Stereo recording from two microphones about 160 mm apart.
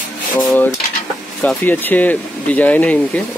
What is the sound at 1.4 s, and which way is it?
Speech, 10° left (ahead or behind).